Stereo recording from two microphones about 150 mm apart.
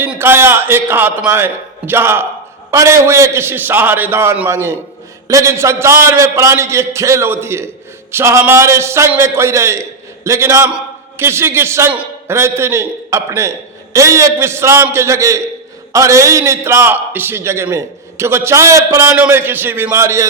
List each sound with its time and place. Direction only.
0.0 s a man's voice: 15° right (ahead or behind)